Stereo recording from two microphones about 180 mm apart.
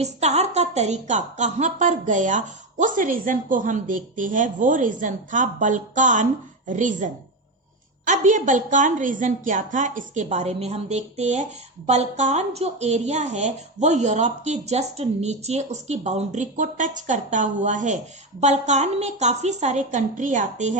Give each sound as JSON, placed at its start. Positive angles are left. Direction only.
{"t": 0.0, "sound": "a woman's voice", "side_deg": -35}